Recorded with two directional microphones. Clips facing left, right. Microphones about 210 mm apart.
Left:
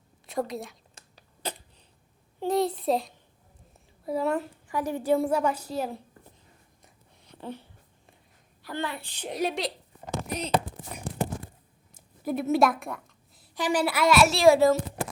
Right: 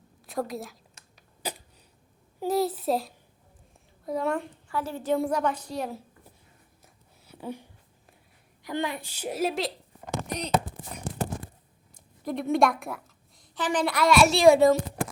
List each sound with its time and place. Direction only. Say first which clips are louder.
0.3 s a woman's voice: left 1 dB; centre (ahead or behind)
1.4 s a sound: even; 10° right (ahead or behind)
2.4 s a woman's voice: even; 5° right (ahead or behind)
4.7 s a woman's voice: left 3 dB; 15° left (ahead or behind)
5.1 s a woman's voice: left 1 dB; 5° left (ahead or behind)
6.8 s a sound: even; 10° right (ahead or behind)
8.6 s a child's voice: right 3 dB; 15° right (ahead or behind); by 10.5 s 5° left (ahead or behind)
11.9 s a sound: left 2 dB; 5° left (ahead or behind)
13.4 s a woman's voice: left 1 dB; 10° left (ahead or behind)